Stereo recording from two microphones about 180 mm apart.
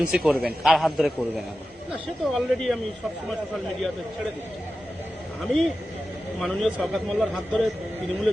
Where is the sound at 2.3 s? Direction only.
Centre (ahead or behind).